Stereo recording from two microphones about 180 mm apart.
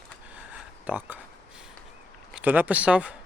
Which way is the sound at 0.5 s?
10° right (ahead or behind).